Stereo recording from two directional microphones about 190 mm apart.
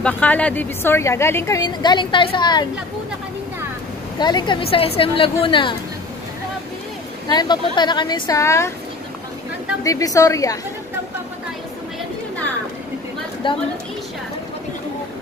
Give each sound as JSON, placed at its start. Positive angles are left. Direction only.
{"t": 0.0, "sound": "a woman's voice", "side_deg": 5}
{"t": 4.2, "sound": "a woman's voice", "side_deg": 25}
{"t": 7.2, "sound": "a woman's voice", "side_deg": 20}
{"t": 9.8, "sound": "a woman's voice", "side_deg": 15}
{"t": 13.4, "sound": "a woman's voice", "side_deg": 25}